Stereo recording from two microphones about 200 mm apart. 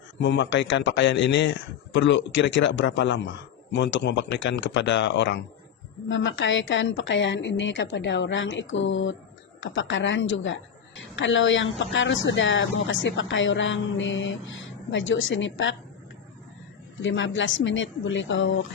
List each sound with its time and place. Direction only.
0.2 s a woman's voice: 65° left (ahead or behind)
17.0 s a woman's voice: 70° left (ahead or behind)